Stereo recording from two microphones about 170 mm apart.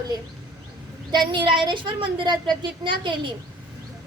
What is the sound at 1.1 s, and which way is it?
A woman's voice, 30° right (ahead or behind).